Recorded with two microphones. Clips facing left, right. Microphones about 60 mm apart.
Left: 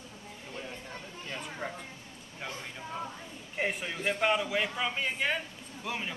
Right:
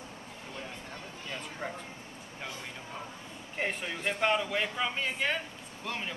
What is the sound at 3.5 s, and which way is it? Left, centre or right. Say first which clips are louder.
A man's voice: left 1 dB; centre.